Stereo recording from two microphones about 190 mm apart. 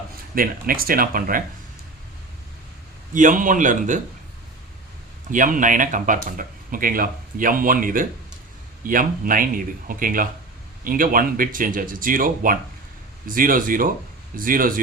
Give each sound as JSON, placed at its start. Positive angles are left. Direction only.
{"t": 0.3, "sound": "speech", "side_deg": -50}
{"t": 3.2, "sound": "speech", "side_deg": -45}
{"t": 5.3, "sound": "speech", "side_deg": -45}